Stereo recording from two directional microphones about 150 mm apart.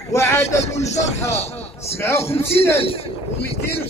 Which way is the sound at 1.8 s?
15° left (ahead or behind).